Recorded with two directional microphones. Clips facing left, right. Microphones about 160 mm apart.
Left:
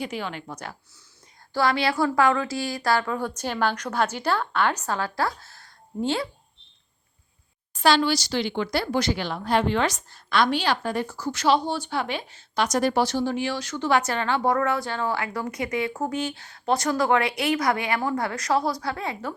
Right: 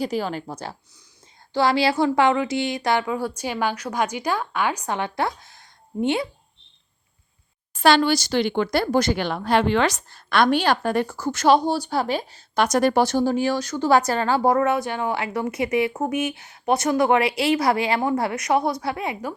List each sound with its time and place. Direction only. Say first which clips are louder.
0.0 s a woman's voice: right 6 dB; 40° right (ahead or behind); by 6.2 s 20° right (ahead or behind)
7.7 s speech: right 3 dB; 55° right (ahead or behind); by 12.4 s 40° right (ahead or behind)
12.5 s a woman's voice: right 4 dB; 60° right (ahead or behind); by 14.5 s 35° right (ahead or behind)
14.5 s speech: right 4 dB; 20° right (ahead or behind)